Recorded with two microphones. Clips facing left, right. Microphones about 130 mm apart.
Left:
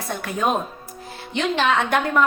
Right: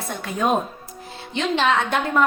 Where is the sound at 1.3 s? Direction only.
25° right (ahead or behind).